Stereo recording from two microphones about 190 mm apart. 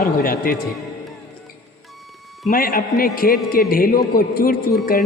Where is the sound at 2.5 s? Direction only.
50° left (ahead or behind).